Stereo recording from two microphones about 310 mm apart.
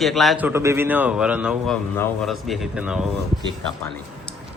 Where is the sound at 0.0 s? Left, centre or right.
Centre.